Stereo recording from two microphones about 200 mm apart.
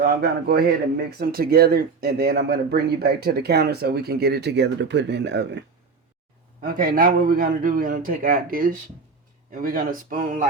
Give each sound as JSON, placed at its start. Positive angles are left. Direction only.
{"t": 0.0, "sound": "speech", "side_deg": -50}
{"t": 6.6, "sound": "speech", "side_deg": -45}